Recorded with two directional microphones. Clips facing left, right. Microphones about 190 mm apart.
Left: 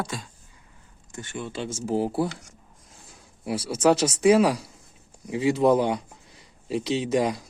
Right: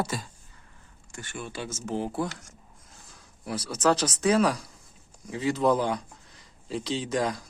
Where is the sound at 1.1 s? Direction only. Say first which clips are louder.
Left 4 dB; 20° left (ahead or behind).